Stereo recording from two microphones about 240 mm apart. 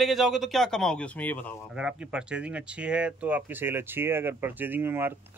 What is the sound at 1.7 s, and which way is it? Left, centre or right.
Speech, centre.